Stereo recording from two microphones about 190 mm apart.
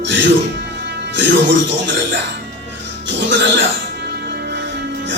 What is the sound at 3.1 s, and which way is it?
Music, 70° right (ahead or behind).